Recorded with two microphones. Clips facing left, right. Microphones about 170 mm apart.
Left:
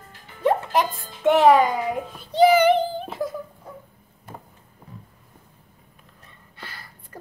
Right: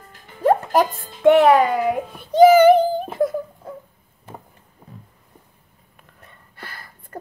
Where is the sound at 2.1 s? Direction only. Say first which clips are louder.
Right 5 dB; 45° right (ahead or behind).